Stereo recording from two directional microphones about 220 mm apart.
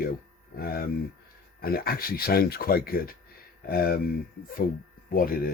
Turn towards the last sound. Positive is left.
turn(degrees=40)  # may be behind; listen again after turning